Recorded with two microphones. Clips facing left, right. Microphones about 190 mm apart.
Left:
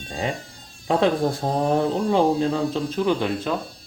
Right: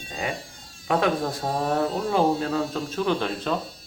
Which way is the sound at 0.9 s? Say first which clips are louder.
Left 3 dB; 30° left (ahead or behind).